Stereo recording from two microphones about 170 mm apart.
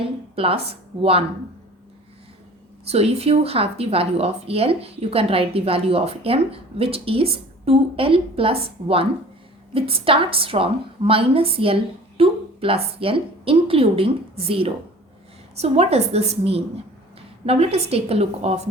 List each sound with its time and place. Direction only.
0.3 s speech: 35° right (ahead or behind)
2.8 s speech: 35° right (ahead or behind)